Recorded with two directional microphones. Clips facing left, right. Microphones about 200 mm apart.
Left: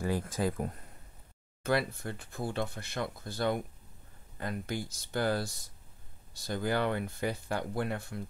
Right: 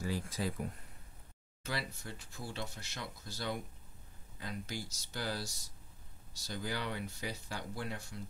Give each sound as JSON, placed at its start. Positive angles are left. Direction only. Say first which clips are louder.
{"t": 0.0, "sound": "speech", "louder": "left 6 dB", "side_deg": 55}